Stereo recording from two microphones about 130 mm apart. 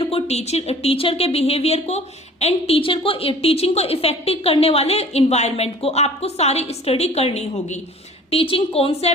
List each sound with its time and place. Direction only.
0.0 s a woman's voice: 50° left (ahead or behind)